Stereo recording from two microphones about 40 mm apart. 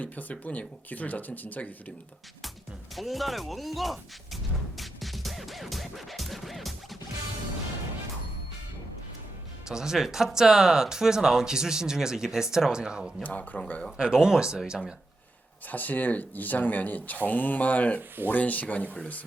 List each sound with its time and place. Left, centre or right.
0.0 s speech: left
2.9 s speech: centre
4.8 s music: centre
9.6 s speech: centre
13.2 s speech: left
13.9 s speech: centre
15.6 s speech: left